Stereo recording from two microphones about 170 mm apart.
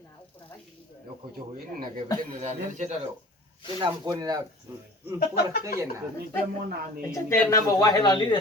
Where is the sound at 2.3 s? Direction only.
45° right (ahead or behind).